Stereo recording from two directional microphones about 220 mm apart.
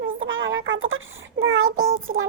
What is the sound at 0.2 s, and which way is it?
Child singing, 65° right (ahead or behind).